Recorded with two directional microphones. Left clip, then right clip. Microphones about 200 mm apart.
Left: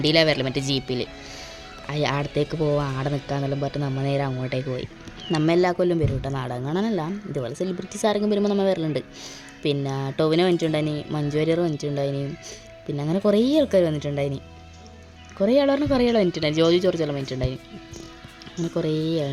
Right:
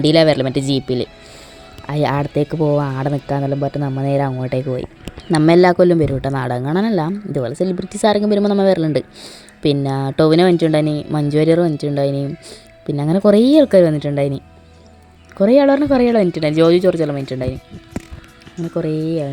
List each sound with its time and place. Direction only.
0.0 s speech: 25° right (ahead or behind)
8.9 s speech: centre (ahead or behind)
9.6 s speech: 25° right (ahead or behind)
15.9 s speech: centre (ahead or behind)
16.8 s speech: 20° right (ahead or behind)
17.3 s speech: 5° right (ahead or behind)
18.9 s speech: 10° left (ahead or behind)